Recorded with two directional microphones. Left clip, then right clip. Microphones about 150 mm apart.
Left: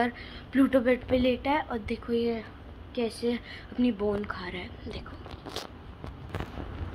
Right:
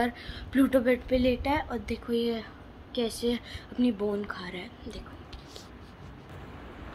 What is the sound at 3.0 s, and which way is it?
Speech, 35° right (ahead or behind).